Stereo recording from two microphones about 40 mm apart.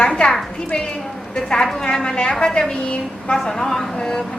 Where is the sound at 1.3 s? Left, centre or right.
Centre.